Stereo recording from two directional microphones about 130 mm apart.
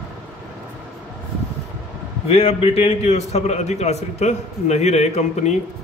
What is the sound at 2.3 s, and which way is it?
Speech, 50° left (ahead or behind).